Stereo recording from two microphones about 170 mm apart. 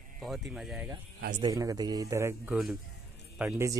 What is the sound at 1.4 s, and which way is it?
A man's voice, 20° right (ahead or behind).